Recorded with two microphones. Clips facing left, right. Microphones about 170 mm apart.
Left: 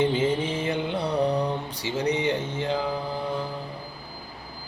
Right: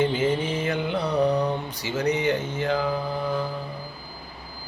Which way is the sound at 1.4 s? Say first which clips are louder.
Right 2 dB; 30° left (ahead or behind).